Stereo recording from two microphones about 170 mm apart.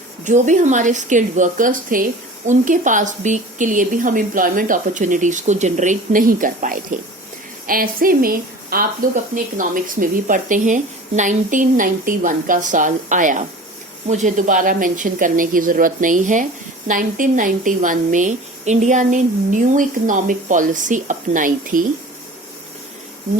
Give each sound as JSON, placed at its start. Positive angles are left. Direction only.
{"t": 0.3, "sound": "speech", "side_deg": -45}